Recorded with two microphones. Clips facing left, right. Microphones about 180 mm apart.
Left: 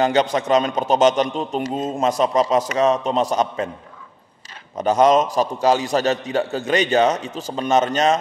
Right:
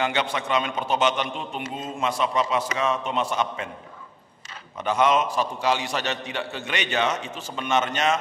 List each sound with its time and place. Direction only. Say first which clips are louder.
0.0 s a man's voice: left 8 dB; 40° left (ahead or behind)
4.7 s a man's voice: left 6 dB; 40° left (ahead or behind)